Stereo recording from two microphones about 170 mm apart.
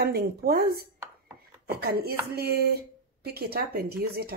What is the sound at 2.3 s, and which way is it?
Chopping, 65° right (ahead or behind).